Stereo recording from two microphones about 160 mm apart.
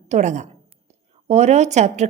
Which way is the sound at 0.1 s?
50° right (ahead or behind).